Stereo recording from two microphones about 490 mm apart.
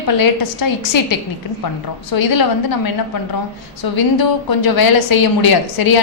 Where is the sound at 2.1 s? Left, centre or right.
Left.